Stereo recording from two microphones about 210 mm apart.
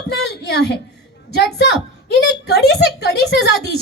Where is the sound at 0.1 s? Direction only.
55° left (ahead or behind).